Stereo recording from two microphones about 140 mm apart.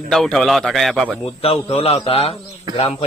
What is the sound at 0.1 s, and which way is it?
A man's voice, centre (ahead or behind).